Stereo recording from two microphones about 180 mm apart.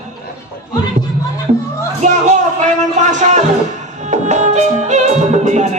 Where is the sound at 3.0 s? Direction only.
40° right (ahead or behind).